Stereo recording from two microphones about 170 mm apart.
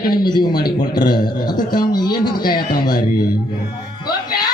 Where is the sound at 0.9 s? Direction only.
25° left (ahead or behind).